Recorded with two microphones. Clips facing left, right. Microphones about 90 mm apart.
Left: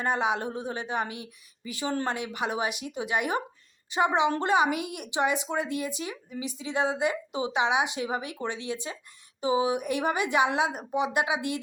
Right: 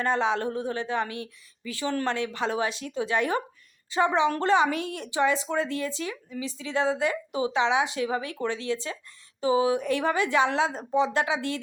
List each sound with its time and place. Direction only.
0.0 s a woman's voice: 15° left (ahead or behind)